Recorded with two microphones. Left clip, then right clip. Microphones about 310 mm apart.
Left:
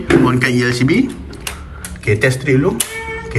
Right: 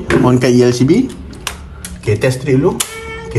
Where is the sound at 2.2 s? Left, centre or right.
Centre.